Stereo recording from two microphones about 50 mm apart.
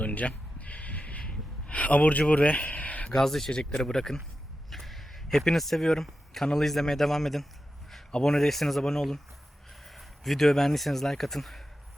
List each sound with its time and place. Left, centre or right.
0.0 s a sound: left
2.3 s speech: left
3.2 s speech: centre